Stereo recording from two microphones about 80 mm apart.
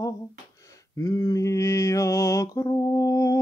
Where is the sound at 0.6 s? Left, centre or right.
Left.